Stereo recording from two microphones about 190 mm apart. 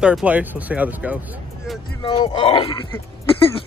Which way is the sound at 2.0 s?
25° left (ahead or behind).